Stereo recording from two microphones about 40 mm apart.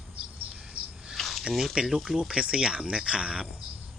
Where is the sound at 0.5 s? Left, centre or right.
Centre.